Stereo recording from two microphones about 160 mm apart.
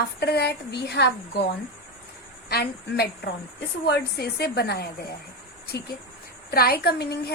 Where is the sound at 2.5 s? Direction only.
85° left.